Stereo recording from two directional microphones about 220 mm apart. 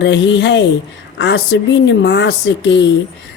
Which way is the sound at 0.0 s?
55° left (ahead or behind).